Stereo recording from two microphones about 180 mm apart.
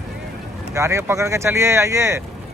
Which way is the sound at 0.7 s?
15° right (ahead or behind).